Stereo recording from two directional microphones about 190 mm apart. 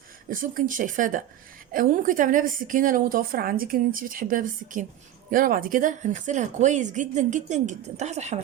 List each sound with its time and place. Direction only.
0.3 s a woman's voice: 45° right (ahead or behind)